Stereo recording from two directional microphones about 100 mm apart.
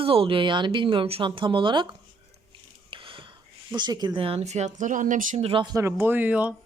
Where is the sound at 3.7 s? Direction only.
45° right (ahead or behind); by 4.6 s 90° right.